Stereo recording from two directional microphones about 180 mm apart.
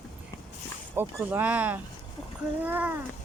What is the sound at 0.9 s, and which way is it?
Speech, 10° right (ahead or behind).